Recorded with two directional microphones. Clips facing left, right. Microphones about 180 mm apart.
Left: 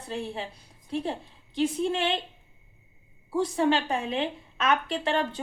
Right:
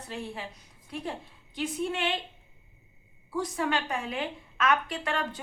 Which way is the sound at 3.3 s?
30° left (ahead or behind).